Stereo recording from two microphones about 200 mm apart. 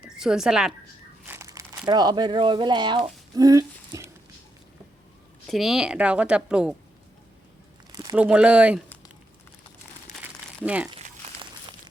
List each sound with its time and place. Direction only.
0.1 s a woman's voice: 5° right (ahead or behind)
1.3 s crumpling: 15° right (ahead or behind)
1.8 s speech: 20° right (ahead or behind)
5.5 s a woman's voice: centre (ahead or behind)
8.1 s speech: 5° right (ahead or behind)
10.6 s speech: 5° right (ahead or behind)